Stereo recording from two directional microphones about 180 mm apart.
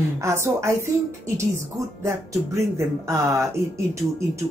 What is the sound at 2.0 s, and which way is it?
A man's voice, 15° right (ahead or behind).